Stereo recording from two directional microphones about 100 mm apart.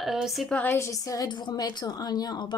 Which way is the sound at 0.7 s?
30° left (ahead or behind).